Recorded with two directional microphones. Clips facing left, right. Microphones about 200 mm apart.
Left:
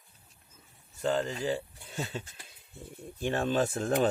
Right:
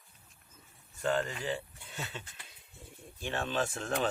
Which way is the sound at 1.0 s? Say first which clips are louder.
Left 3 dB; 30° left (ahead or behind).